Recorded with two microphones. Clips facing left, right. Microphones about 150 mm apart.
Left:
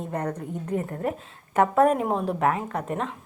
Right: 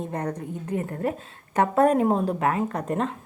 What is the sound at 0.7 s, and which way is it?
Speech, 25° left (ahead or behind).